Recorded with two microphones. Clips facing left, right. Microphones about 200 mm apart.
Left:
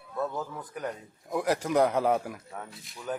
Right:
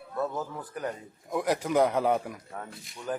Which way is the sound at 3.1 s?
Centre (ahead or behind).